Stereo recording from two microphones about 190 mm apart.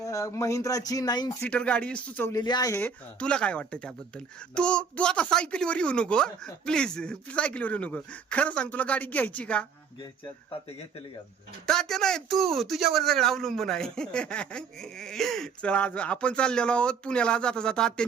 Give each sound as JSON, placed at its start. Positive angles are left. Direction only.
{"t": 0.0, "sound": "speech", "side_deg": 15}
{"t": 1.4, "sound": "speech", "side_deg": 5}
{"t": 2.3, "sound": "speech", "side_deg": 20}
{"t": 11.6, "sound": "speech", "side_deg": 5}